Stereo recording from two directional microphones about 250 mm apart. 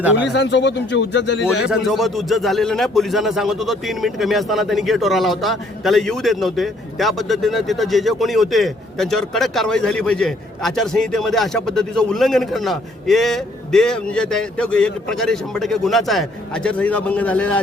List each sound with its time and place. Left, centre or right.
0.3 s speech: left
1.6 s speech: centre